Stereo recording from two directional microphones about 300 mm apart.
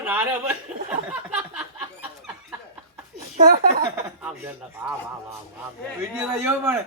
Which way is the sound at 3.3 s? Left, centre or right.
Right.